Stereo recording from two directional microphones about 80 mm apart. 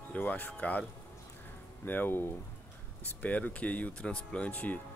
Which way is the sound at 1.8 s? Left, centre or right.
Left.